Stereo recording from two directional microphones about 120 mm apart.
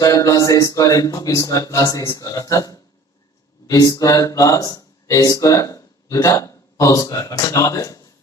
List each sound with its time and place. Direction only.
0.0 s speech: 30° left (ahead or behind)